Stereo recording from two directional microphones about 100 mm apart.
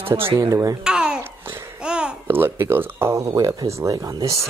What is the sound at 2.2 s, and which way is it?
Speech, 20° right (ahead or behind).